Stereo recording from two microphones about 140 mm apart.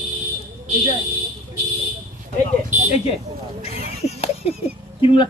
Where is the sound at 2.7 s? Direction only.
60° right (ahead or behind).